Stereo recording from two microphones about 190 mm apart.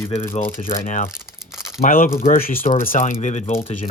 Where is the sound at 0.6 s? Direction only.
45° left (ahead or behind).